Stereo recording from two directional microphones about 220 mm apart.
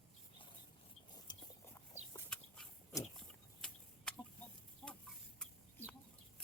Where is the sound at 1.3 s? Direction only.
20° left (ahead or behind).